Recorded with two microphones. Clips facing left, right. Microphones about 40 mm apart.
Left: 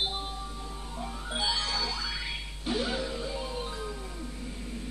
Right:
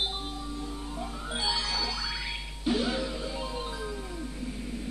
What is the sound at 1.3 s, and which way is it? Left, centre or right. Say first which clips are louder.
Music: even; centre.